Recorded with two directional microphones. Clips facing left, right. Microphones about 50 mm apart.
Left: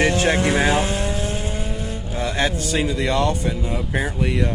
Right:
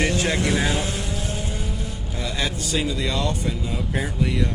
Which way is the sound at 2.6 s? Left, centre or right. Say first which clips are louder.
Left 3 dB; left.